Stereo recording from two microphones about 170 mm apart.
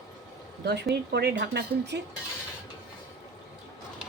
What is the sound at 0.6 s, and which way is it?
Speech, 75° right (ahead or behind).